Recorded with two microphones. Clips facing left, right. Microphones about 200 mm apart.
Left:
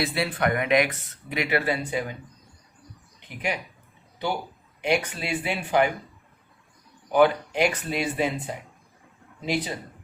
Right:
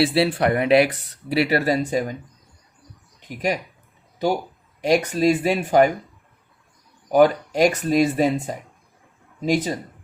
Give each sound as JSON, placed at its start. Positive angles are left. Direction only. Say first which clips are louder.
{"t": 0.0, "sound": "speech", "louder": "right 7 dB", "side_deg": -30}
{"t": 3.2, "sound": "speech", "louder": "right 6 dB", "side_deg": -40}
{"t": 4.8, "sound": "speech", "louder": "right 7 dB", "side_deg": -40}
{"t": 7.1, "sound": "speech", "louder": "right 4 dB", "side_deg": -40}